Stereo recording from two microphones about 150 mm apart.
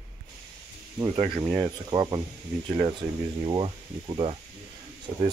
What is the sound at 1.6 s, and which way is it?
Speech, 30° right (ahead or behind).